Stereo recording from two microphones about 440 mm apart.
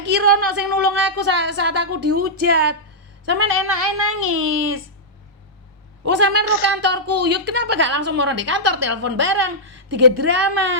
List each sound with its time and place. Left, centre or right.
0.0 s a woman's voice: right
6.1 s a woman's voice: right